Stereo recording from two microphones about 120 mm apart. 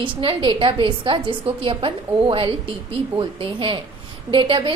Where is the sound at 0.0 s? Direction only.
45° right (ahead or behind).